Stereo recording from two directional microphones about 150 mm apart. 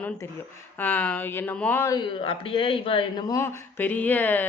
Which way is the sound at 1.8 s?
20° left (ahead or behind).